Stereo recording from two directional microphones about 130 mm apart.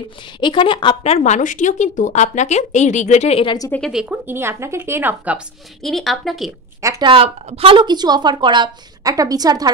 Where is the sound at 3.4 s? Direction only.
30° left (ahead or behind).